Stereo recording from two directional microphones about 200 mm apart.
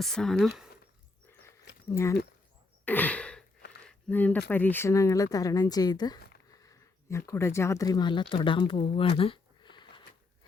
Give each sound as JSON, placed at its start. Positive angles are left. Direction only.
{"t": 0.0, "sound": "speech", "side_deg": 0}
{"t": 1.3, "sound": "a sound", "side_deg": 10}
{"t": 1.9, "sound": "speech", "side_deg": 15}
{"t": 2.8, "sound": "sigh", "side_deg": 10}
{"t": 3.8, "sound": "speech", "side_deg": 10}